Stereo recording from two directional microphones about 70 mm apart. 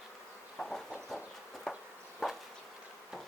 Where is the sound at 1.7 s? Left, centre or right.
Centre.